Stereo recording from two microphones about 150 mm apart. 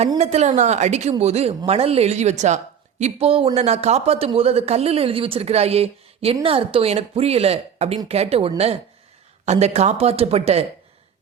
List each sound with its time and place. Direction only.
0.2 s speech: 45° right (ahead or behind)